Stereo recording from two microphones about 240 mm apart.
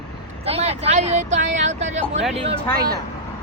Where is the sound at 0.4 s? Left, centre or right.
Right.